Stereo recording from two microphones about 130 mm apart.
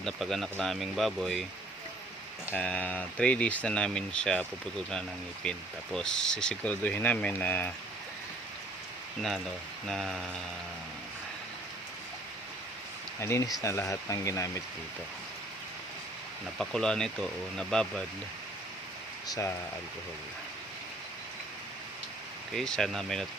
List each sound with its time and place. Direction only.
0.0 s speech: centre (ahead or behind)
2.6 s speech: 10° left (ahead or behind)
9.8 s speech: 5° left (ahead or behind)
13.1 s speech: 20° left (ahead or behind)
16.6 s speech: 5° left (ahead or behind)
19.3 s speech: 25° left (ahead or behind)
22.5 s speech: 5° left (ahead or behind)